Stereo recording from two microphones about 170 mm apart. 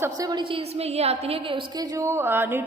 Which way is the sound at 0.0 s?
20° right (ahead or behind).